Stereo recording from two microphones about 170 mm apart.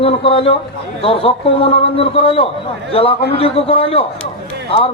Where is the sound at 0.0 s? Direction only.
35° left (ahead or behind).